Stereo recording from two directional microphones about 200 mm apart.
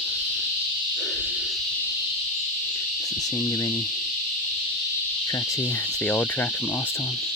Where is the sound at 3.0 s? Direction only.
15° left (ahead or behind).